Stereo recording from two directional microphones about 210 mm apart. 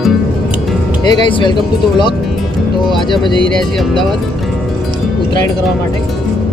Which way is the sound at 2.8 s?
20° left (ahead or behind).